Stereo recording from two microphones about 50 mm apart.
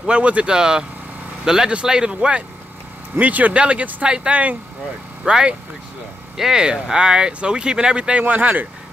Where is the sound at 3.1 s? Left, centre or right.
Right.